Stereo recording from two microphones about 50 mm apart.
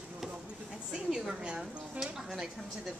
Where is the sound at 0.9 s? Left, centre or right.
Centre.